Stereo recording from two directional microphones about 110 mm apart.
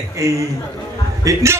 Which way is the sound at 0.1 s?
30° right (ahead or behind).